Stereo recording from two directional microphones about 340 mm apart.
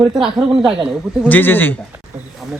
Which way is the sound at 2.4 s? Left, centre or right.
Centre.